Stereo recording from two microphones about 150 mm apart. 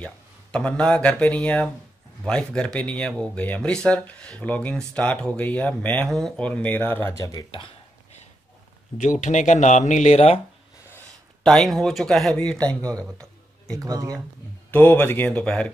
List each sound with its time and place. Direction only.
0.0 s speech: 5° left (ahead or behind)
8.9 s speech: 50° left (ahead or behind)
11.4 s speech: centre (ahead or behind)
13.7 s speech: 25° right (ahead or behind)
14.7 s speech: 10° left (ahead or behind)